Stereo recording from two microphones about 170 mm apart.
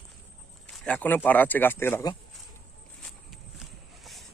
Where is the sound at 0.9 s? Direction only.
10° left (ahead or behind).